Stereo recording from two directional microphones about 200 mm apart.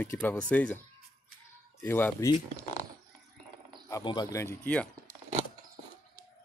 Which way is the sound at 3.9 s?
20° left (ahead or behind).